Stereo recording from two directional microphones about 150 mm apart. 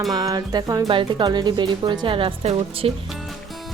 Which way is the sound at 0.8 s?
35° right (ahead or behind).